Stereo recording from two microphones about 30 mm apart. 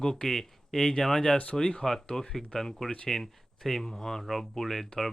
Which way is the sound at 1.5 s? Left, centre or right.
Centre.